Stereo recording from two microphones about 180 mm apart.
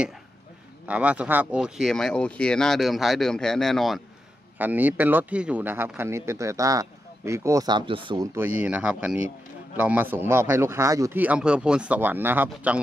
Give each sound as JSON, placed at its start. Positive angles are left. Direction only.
{"t": 0.8, "sound": "speech", "side_deg": -5}
{"t": 4.6, "sound": "speech", "side_deg": -10}
{"t": 8.4, "sound": "speech", "side_deg": -10}